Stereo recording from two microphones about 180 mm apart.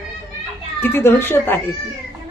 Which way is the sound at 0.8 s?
10° left (ahead or behind).